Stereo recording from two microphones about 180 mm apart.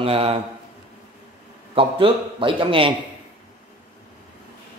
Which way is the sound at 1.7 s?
30° right (ahead or behind).